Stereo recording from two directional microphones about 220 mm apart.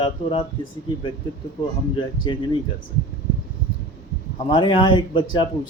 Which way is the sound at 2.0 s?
20° left (ahead or behind).